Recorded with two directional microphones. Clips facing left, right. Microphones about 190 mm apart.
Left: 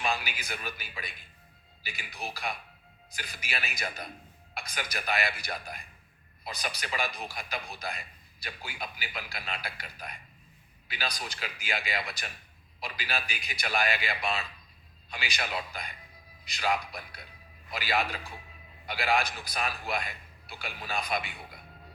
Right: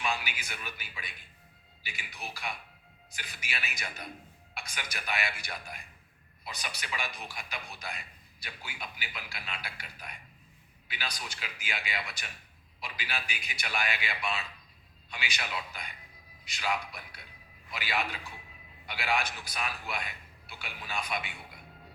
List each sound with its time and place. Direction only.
0.0 s a man's voice: 35° left (ahead or behind)